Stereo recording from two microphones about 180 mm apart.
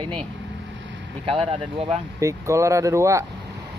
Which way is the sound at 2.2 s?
15° right (ahead or behind).